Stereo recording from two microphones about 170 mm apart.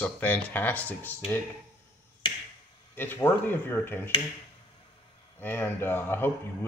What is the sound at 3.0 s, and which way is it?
Speech, 10° left (ahead or behind).